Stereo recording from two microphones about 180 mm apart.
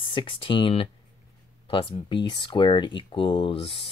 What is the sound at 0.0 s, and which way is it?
Speech, 30° left (ahead or behind).